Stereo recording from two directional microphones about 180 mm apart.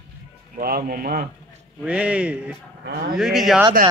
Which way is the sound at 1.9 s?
5° right (ahead or behind).